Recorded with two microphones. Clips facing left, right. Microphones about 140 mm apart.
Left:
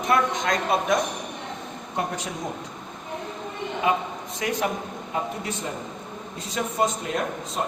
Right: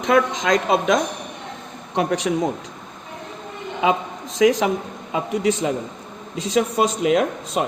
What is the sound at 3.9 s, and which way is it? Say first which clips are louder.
Speech: right 3 dB; 90° right.